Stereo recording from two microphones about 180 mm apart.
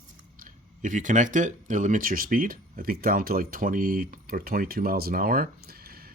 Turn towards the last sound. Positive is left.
turn(degrees=-55)  # may be behind; listen again after turning